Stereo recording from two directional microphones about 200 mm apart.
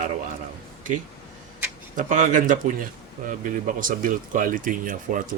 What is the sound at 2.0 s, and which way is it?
Speech, 40° right (ahead or behind).